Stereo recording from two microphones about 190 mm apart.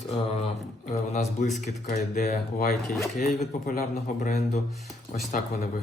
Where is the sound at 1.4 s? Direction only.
40° left (ahead or behind).